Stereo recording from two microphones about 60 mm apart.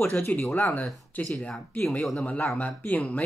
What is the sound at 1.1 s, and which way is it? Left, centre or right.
Speech, left.